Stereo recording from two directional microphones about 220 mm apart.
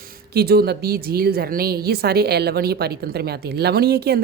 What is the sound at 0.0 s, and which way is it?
Speech, 45° right (ahead or behind).